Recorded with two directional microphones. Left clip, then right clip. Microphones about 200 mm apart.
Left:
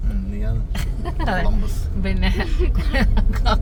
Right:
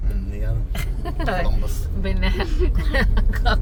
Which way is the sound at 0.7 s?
Centre (ahead or behind).